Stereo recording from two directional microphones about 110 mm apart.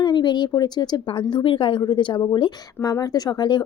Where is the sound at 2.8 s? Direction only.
35° left (ahead or behind).